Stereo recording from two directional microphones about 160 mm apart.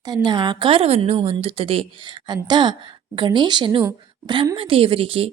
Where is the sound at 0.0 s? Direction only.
25° right (ahead or behind).